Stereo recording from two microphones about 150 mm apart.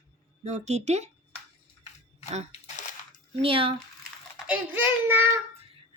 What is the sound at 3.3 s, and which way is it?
Speech, 40° right (ahead or behind).